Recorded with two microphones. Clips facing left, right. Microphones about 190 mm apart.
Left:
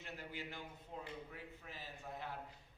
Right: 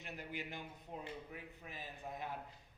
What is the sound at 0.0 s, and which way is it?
A man's voice, 15° right (ahead or behind).